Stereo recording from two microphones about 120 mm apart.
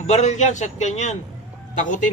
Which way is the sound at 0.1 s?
75° left (ahead or behind).